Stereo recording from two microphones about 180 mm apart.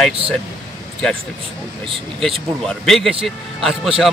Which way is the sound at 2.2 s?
Centre (ahead or behind).